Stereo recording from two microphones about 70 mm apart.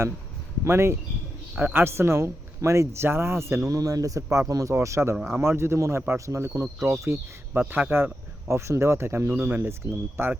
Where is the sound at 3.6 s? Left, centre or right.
Right.